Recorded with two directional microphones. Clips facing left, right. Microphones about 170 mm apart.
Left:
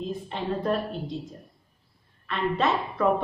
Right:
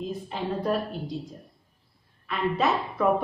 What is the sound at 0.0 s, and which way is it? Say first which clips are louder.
A woman's voice: even; centre (ahead or behind).